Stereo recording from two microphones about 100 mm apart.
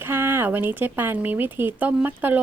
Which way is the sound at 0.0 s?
20° right (ahead or behind).